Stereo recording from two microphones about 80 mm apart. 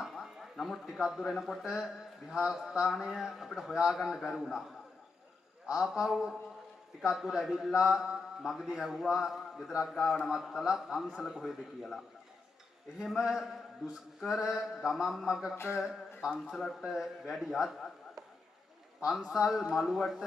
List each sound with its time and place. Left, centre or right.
0.0 s speech: centre
5.7 s speech: centre
13.0 s speech: centre
15.5 s a sound: left
15.8 s a sound: centre
16.3 s speech: centre
18.9 s speech: centre